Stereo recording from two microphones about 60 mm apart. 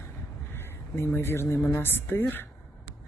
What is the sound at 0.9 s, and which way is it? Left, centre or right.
Speech, left.